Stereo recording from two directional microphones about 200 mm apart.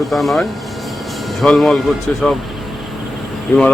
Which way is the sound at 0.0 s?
Centre (ahead or behind).